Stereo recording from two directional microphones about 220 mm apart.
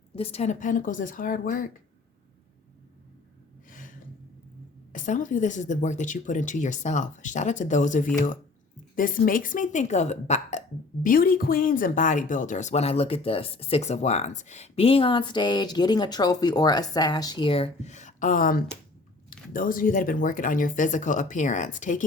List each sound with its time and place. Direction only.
0.2 s speech: 25° left (ahead or behind)
3.7 s gasp: 40° left (ahead or behind)
4.9 s speech: 35° left (ahead or behind)